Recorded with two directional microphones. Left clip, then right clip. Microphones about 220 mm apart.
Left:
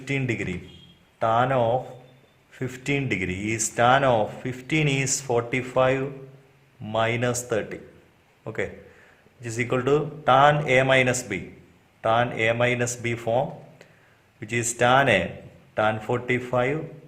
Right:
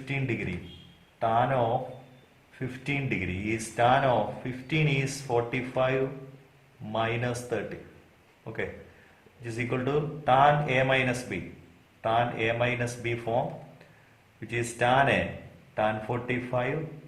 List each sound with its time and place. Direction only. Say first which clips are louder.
0.0 s a man's voice: left 5 dB; 45° left (ahead or behind)